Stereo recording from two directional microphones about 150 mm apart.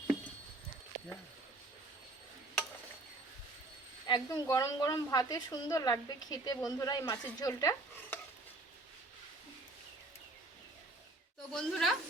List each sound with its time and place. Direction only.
4.0 s a woman's voice: 25° left (ahead or behind)
6.7 s chopping: 25° left (ahead or behind)
11.5 s a woman's voice: centre (ahead or behind)